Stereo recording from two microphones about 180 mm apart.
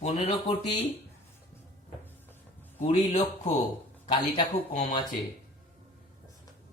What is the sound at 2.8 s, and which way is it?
Speech, 35° left (ahead or behind).